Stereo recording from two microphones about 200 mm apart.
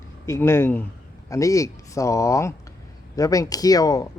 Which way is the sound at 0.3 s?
15° left (ahead or behind).